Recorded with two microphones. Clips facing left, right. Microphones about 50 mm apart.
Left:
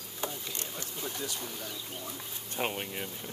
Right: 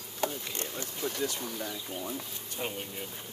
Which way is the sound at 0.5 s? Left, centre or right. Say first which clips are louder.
Right 3 dB; right.